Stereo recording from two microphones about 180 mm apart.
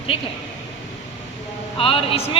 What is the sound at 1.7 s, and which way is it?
Speech, 30° left (ahead or behind).